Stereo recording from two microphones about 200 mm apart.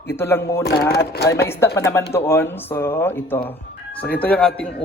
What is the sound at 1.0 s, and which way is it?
Speech, 55° left (ahead or behind).